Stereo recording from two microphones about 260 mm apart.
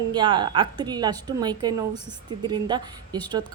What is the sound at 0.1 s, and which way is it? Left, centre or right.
A woman's voice, centre.